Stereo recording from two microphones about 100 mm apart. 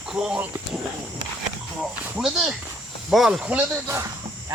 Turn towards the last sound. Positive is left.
turn(degrees=-15)  # may be behind; listen again after turning